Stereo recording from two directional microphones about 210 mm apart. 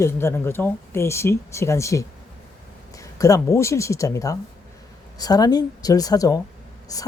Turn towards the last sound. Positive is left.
turn(degrees=15)  # may be behind; listen again after turning